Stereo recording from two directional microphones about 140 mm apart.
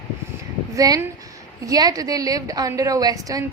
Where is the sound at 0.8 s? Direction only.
25° right (ahead or behind).